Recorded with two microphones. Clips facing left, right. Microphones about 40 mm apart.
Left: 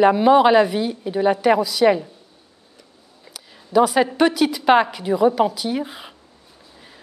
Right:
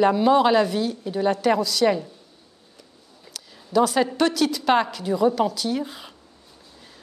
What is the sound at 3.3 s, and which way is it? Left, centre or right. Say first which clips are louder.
A woman's voice: left 3 dB; centre.